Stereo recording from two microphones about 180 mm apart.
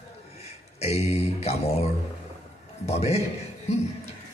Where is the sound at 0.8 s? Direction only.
35° left (ahead or behind).